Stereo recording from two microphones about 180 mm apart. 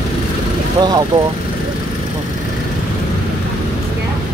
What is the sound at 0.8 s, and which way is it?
Vehicle, 20° right (ahead or behind).